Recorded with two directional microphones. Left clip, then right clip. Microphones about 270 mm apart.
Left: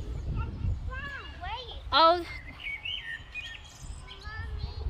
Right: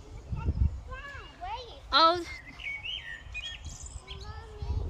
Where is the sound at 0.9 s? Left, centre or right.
Right.